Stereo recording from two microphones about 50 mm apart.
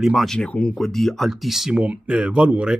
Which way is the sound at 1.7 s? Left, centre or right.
Right.